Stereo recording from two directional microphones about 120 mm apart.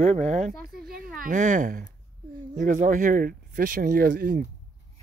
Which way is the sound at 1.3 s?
90° right.